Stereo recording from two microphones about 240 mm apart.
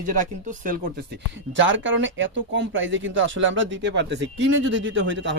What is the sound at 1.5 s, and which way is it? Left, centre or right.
Speech, right.